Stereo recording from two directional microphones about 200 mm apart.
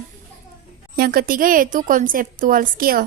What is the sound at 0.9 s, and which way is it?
A woman's voice, 50° right (ahead or behind).